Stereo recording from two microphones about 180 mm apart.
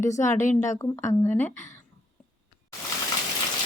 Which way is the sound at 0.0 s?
15° left (ahead or behind).